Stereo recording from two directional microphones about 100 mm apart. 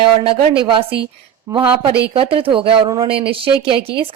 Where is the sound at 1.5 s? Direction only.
35° right (ahead or behind).